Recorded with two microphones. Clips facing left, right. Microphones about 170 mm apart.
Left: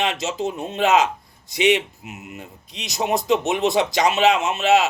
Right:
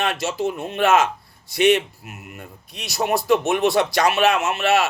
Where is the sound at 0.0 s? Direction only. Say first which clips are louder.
Right 1 dB; 20° left (ahead or behind).